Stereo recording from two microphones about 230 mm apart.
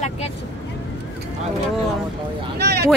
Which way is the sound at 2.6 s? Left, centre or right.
Right.